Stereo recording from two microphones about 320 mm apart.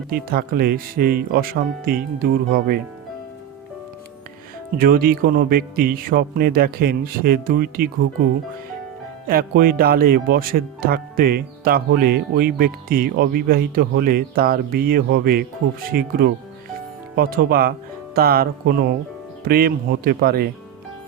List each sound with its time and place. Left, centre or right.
0.1 s speech: right
4.8 s speech: right
9.2 s speech: right